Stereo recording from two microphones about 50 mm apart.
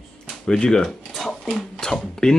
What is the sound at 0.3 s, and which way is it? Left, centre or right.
Speech, centre.